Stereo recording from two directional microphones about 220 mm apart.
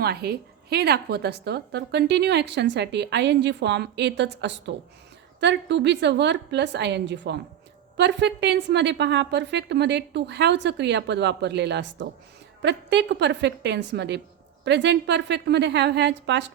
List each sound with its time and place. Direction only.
0.0 s a woman's voice: 45° right (ahead or behind)